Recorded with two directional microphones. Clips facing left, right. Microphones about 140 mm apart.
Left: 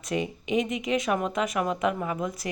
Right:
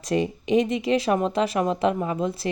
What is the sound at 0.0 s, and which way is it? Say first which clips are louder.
Speech: right 5 dB; 35° right (ahead or behind).